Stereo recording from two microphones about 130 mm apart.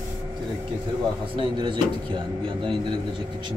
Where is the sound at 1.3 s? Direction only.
40° right (ahead or behind).